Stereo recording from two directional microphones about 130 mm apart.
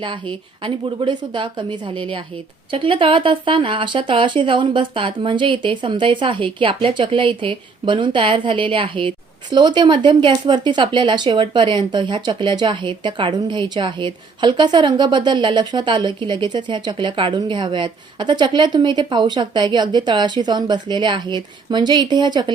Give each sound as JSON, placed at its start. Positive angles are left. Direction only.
{"t": 0.0, "sound": "speech", "side_deg": -40}